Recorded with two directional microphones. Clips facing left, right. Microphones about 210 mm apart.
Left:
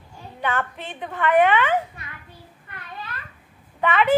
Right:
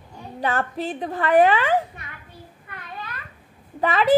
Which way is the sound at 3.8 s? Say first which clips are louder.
Even; 35° right (ahead or behind).